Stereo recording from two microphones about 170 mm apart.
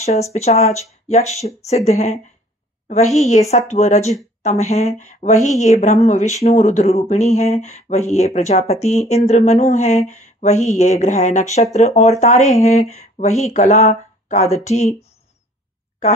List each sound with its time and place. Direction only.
0.0 s speech: 40° left (ahead or behind)